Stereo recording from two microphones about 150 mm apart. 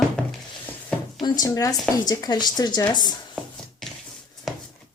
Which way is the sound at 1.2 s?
25° left (ahead or behind).